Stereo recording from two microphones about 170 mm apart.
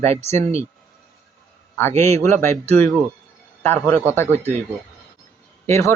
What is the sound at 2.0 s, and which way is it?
Speech, 15° left (ahead or behind).